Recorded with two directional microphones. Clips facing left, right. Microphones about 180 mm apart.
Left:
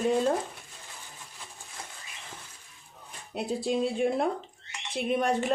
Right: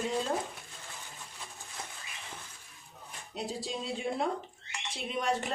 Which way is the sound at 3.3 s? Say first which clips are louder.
Left 8 dB; 55° left (ahead or behind).